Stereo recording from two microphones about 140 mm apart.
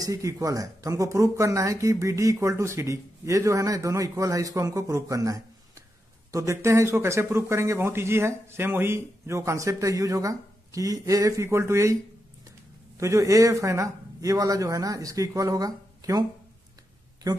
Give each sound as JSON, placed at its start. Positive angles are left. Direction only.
{"t": 0.0, "sound": "speech", "side_deg": -25}
{"t": 13.0, "sound": "speech", "side_deg": -25}